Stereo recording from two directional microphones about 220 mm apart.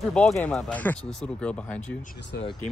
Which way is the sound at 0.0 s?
Centre (ahead or behind).